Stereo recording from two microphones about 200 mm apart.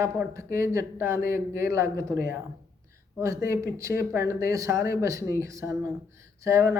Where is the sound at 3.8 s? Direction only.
15° right (ahead or behind).